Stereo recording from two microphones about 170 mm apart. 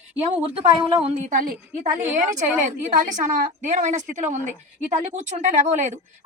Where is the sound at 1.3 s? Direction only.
55° right (ahead or behind).